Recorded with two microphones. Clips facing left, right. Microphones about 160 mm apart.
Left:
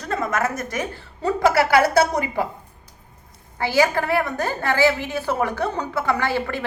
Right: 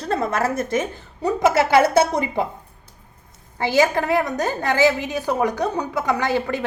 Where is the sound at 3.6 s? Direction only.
20° right (ahead or behind).